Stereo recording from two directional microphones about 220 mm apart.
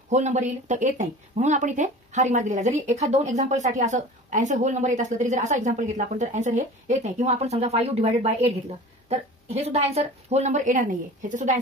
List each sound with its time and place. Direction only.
0.1 s speech: 30° right (ahead or behind)